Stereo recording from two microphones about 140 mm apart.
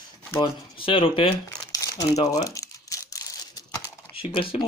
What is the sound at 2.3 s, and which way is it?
Crumpling, 25° left (ahead or behind).